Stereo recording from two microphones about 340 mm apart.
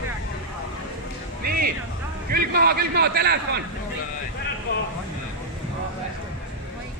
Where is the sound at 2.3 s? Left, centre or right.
Right.